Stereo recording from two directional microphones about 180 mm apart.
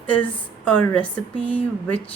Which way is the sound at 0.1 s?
10° left (ahead or behind).